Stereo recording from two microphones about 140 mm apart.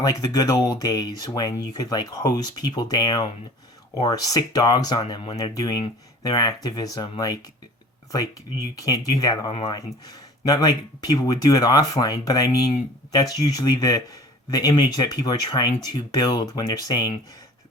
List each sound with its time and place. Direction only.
0.0 s speech: 25° left (ahead or behind)
5.4 s speech: 25° left (ahead or behind)
9.5 s speech: 40° left (ahead or behind)
9.7 s speech: 25° left (ahead or behind)